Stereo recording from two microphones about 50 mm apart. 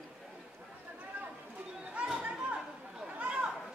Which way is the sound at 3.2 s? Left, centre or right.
Right.